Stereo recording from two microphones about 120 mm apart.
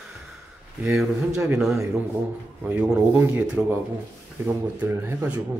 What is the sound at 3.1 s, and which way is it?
Speech, 20° right (ahead or behind).